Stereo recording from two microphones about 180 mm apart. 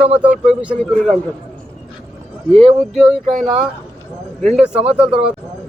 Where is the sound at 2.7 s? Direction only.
Centre (ahead or behind).